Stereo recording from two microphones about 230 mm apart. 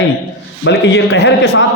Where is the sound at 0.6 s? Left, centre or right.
Left.